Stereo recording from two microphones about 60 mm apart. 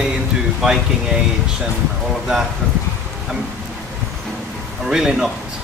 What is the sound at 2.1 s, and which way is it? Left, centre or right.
Speech, centre.